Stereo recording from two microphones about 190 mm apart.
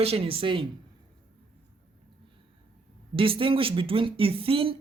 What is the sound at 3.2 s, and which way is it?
Speech, 30° right (ahead or behind).